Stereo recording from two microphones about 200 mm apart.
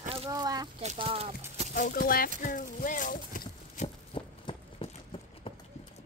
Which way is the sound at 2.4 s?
40° left (ahead or behind).